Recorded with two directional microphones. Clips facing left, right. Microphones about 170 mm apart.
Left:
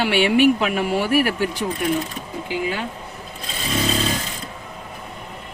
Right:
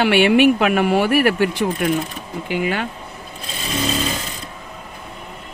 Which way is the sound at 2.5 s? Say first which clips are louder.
Right 4 dB; 65° right (ahead or behind).